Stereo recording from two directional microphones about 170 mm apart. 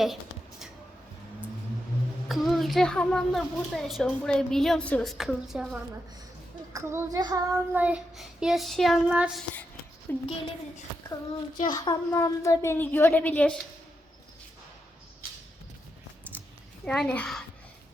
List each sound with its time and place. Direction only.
2.2 s a child's voice: centre (ahead or behind)
6.7 s a child's voice: 15° right (ahead or behind)
10.1 s a child's voice: 10° left (ahead or behind)
11.6 s a child's voice: 25° left (ahead or behind); by 13.6 s 10° left (ahead or behind)
16.3 s a sound: 10° right (ahead or behind)
16.8 s a child's voice: 5° left (ahead or behind)